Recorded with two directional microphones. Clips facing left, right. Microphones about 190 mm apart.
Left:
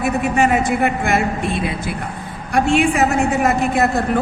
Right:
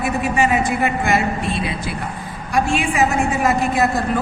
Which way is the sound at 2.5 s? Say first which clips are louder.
Left 3 dB; 60° left (ahead or behind).